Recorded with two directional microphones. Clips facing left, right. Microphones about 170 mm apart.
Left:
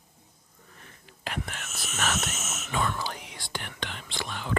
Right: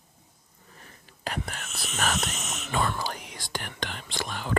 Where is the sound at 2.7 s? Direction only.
35° right (ahead or behind).